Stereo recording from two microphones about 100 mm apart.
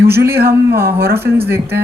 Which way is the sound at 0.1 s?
25° right (ahead or behind).